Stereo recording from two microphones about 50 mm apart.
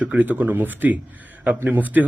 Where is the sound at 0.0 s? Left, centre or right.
Right.